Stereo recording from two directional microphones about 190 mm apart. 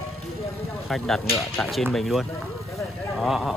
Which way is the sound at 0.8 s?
Centre (ahead or behind).